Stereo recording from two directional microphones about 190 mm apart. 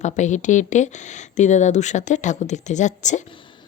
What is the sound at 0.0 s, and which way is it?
A woman's voice, 40° left (ahead or behind).